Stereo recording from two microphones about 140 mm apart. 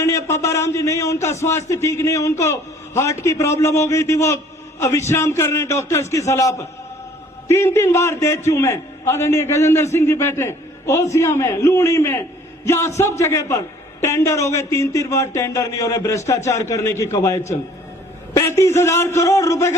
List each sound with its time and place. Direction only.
0.0 s a man's voice: 20° left (ahead or behind)